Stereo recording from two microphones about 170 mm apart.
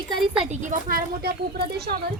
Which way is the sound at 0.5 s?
45° right (ahead or behind).